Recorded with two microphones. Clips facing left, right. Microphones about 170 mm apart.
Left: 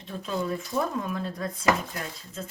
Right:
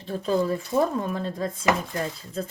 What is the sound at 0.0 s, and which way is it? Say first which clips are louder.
Speech: right 7 dB; 35° right (ahead or behind).